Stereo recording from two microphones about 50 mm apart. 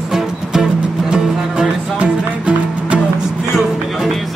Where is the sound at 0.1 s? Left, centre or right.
Centre.